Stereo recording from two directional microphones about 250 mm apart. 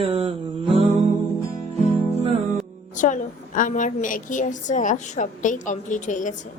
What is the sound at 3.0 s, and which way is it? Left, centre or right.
A woman's voice, left.